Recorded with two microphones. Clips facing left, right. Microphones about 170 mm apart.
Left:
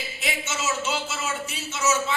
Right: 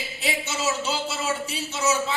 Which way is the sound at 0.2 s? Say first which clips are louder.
Right 2 dB; 35° right (ahead or behind).